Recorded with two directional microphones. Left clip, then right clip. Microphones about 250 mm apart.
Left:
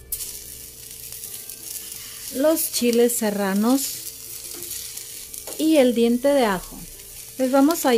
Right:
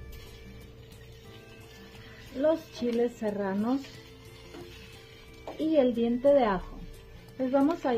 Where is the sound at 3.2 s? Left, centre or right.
Left.